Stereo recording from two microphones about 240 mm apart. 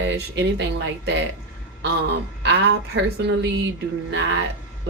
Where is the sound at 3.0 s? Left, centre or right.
Right.